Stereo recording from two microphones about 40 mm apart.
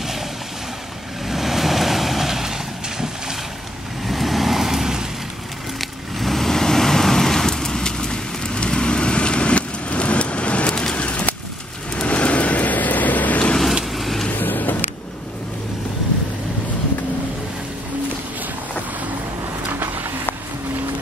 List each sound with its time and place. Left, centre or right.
1.2 s vehicle: centre
4.1 s vehicle: centre
5.8 s vehicle: centre; by 10.7 s left
10.7 s a sound: centre
11.0 s a sound: left
12.0 s vehicle: left
13.9 s vehicle: centre
14.3 s vehicle: left
19.7 s music: right